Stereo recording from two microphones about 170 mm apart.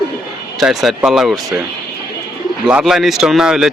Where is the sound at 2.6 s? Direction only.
5° right (ahead or behind).